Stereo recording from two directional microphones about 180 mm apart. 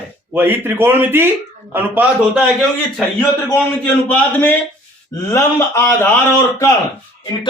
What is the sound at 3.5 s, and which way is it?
A man's voice, 10° left (ahead or behind).